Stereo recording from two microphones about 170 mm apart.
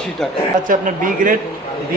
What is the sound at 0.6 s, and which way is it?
Speech, 55° right (ahead or behind).